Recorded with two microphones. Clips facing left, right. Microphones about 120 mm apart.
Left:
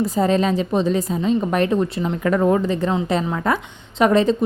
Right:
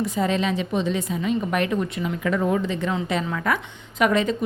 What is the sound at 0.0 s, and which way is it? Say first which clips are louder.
A woman's voice: left 5 dB; 40° left (ahead or behind).